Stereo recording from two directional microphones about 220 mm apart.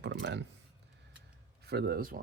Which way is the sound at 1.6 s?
45° right (ahead or behind).